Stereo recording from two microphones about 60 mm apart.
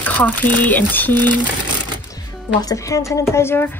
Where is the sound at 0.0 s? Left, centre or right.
Left.